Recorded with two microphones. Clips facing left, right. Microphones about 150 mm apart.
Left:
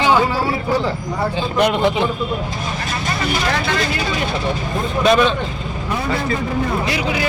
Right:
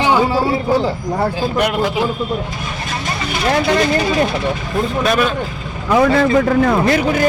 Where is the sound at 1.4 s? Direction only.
5° right (ahead or behind).